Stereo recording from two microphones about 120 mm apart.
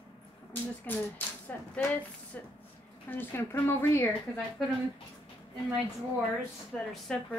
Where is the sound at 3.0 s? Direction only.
15° left (ahead or behind).